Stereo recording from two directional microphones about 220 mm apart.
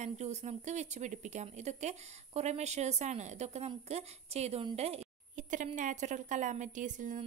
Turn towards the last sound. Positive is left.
turn(degrees=-35)  # may be behind; listen again after turning